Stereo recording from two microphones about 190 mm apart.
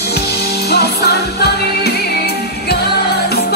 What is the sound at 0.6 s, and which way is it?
Music, 55° left (ahead or behind).